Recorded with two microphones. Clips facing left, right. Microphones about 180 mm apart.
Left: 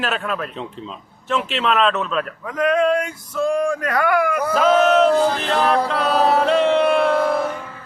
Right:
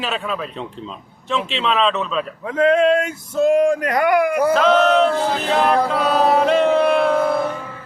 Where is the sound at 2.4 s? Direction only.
25° right (ahead or behind).